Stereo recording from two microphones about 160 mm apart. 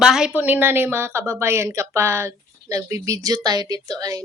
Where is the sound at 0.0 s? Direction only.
5° right (ahead or behind).